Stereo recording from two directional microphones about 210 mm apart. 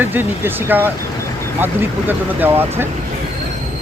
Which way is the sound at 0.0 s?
10° right (ahead or behind).